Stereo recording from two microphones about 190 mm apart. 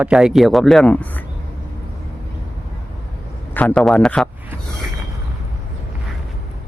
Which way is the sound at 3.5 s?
5° left (ahead or behind).